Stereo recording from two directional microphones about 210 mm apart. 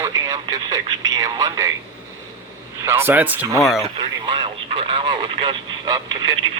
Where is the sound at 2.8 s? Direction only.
10° right (ahead or behind).